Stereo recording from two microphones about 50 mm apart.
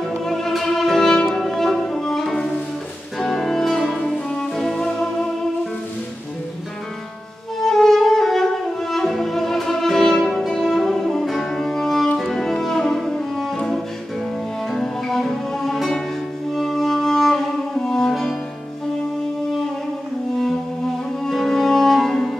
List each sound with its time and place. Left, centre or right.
0.2 s music: centre
7.6 s music: centre
12.2 s cello: centre
14.7 s music: centre
21.2 s music: centre